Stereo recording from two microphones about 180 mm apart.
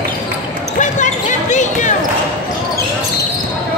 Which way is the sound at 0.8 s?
40° left (ahead or behind).